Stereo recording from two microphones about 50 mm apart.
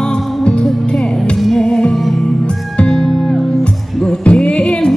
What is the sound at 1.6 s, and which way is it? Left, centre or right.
Music, centre.